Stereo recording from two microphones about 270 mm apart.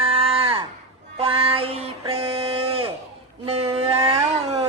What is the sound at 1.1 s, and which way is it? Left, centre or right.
Child singing, right.